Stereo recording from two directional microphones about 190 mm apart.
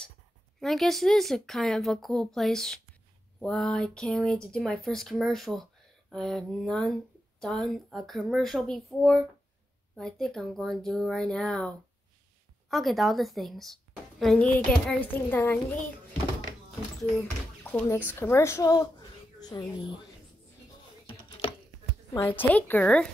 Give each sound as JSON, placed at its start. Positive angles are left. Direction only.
{"t": 0.6, "sound": "a child's voice", "side_deg": 0}
{"t": 17.6, "sound": "a child's voice", "side_deg": 10}
{"t": 21.1, "sound": "chopping", "side_deg": 30}
{"t": 22.1, "sound": "a child's voice", "side_deg": 10}